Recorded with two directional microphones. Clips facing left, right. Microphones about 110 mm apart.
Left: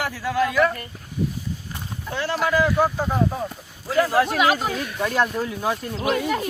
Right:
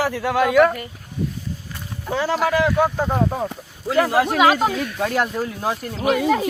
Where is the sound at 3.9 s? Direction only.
70° right (ahead or behind).